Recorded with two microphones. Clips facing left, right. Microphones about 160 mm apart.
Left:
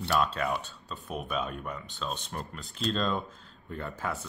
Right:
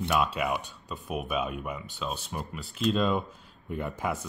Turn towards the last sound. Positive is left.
turn(degrees=-15)  # may be behind; listen again after turning